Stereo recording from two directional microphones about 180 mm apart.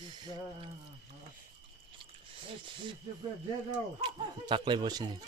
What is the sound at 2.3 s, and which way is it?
Speech, 30° right (ahead or behind).